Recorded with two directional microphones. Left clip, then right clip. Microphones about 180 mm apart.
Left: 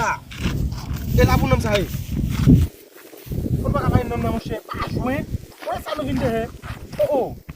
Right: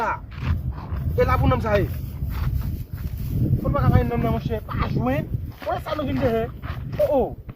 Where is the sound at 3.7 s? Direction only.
25° left (ahead or behind).